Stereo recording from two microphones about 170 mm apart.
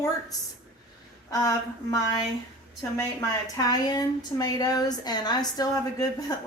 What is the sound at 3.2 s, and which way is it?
Speech, 20° left (ahead or behind).